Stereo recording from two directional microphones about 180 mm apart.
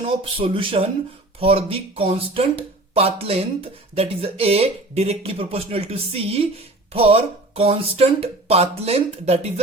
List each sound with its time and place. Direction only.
0.0 s speech: 30° right (ahead or behind)